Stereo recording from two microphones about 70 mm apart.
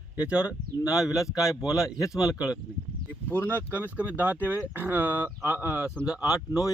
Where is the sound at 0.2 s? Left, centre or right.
Centre.